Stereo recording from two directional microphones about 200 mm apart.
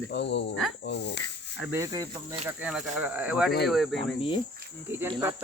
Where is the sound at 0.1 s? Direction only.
60° left (ahead or behind).